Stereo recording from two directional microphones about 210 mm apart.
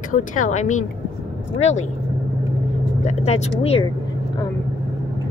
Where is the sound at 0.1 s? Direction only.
40° left (ahead or behind).